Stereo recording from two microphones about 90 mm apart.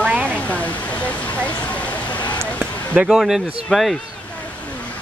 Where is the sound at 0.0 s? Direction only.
15° right (ahead or behind).